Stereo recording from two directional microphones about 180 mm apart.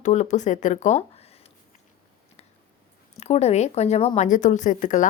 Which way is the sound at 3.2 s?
35° left (ahead or behind).